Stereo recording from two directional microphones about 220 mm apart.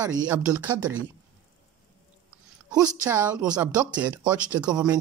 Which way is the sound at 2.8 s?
5° right (ahead or behind).